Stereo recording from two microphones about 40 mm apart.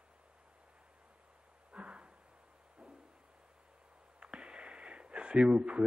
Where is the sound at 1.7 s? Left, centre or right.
Right.